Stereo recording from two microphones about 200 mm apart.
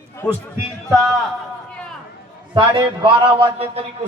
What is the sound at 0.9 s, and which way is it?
Speech, centre (ahead or behind).